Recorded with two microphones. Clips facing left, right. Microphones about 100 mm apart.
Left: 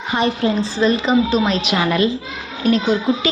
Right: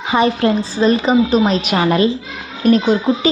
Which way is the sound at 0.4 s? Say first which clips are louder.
Right 3 dB; 70° right (ahead or behind).